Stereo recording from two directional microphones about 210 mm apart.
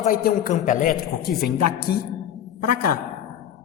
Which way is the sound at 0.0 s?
45° left (ahead or behind).